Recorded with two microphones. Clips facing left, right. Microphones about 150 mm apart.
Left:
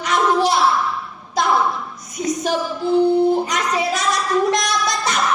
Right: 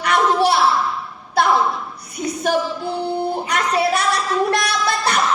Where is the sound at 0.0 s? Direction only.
60° right (ahead or behind).